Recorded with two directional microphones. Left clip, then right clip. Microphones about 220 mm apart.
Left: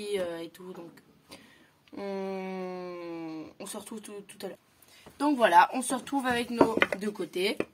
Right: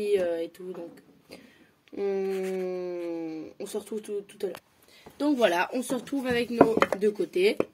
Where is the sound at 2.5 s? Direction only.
90° left.